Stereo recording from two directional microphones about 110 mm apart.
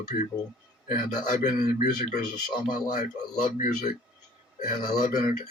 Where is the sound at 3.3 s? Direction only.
90° left.